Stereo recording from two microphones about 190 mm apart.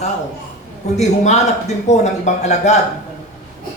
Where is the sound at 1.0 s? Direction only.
35° left (ahead or behind).